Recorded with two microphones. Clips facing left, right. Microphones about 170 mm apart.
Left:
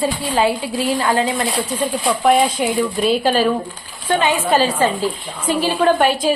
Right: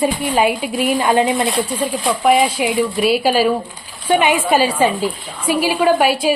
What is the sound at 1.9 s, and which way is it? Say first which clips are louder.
A woman's voice: even; centre (ahead or behind).